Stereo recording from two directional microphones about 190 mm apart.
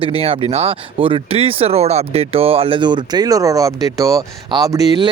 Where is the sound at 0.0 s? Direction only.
30° right (ahead or behind).